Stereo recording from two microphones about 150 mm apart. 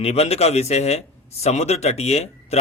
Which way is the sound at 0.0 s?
45° left (ahead or behind).